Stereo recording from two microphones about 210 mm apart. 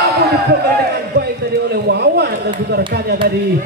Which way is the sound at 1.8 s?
50° right (ahead or behind).